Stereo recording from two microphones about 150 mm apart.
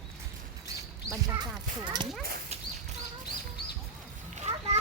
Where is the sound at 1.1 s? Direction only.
25° right (ahead or behind).